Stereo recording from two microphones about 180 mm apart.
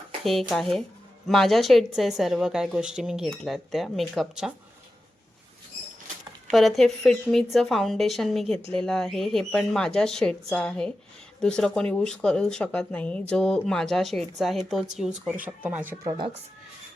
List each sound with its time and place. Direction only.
0.3 s a woman's voice: centre (ahead or behind)
6.5 s a woman's voice: centre (ahead or behind)
16.0 s speech: 25° right (ahead or behind)